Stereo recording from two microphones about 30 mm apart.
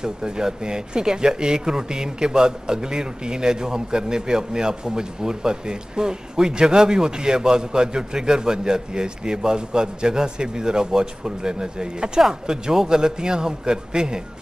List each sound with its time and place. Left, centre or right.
0.0 s speech: right